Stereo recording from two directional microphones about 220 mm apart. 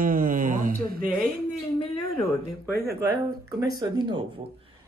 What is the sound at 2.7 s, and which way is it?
Speech, 45° right (ahead or behind).